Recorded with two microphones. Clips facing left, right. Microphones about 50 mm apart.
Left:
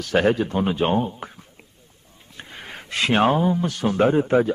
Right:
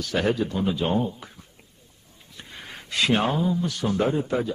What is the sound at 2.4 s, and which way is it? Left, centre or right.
Speech, left.